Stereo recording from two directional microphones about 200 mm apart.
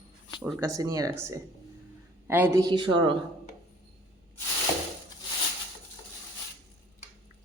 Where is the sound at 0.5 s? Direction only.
15° right (ahead or behind).